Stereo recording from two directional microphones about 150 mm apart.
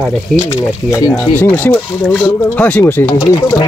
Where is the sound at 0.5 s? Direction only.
20° left (ahead or behind).